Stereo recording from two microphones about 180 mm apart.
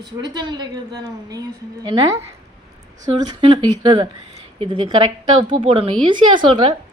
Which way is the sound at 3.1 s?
25° right (ahead or behind).